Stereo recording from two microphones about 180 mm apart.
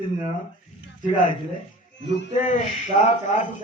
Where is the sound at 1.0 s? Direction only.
45° left (ahead or behind).